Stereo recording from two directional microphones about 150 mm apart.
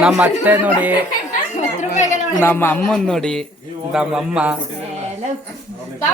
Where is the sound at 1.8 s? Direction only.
50° left (ahead or behind).